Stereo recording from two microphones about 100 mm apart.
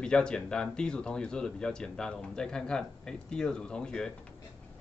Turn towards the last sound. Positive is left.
turn(degrees=5)  # may be behind; listen again after turning